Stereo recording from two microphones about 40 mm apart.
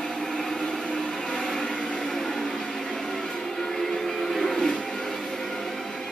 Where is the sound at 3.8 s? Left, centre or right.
Centre.